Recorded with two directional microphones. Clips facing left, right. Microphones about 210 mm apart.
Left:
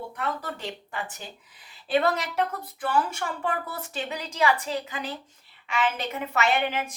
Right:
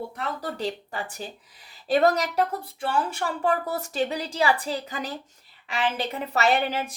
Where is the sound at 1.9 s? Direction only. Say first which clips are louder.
Right 3 dB; 40° right (ahead or behind).